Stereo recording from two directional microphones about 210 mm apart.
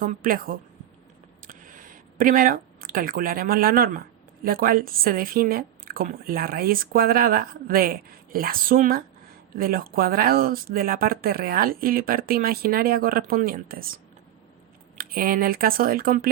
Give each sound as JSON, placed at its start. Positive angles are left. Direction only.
{"t": 0.0, "sound": "speech", "side_deg": -40}
{"t": 1.5, "sound": "a sound", "side_deg": -40}
{"t": 4.4, "sound": "speech", "side_deg": -45}